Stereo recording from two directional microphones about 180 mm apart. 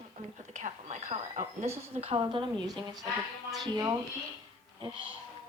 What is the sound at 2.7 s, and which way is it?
Speech, centre (ahead or behind).